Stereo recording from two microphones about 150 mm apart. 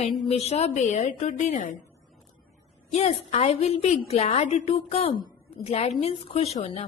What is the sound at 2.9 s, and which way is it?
A woman's voice, 45° left (ahead or behind).